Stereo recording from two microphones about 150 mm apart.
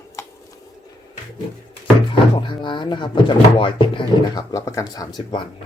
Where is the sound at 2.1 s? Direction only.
30° left (ahead or behind).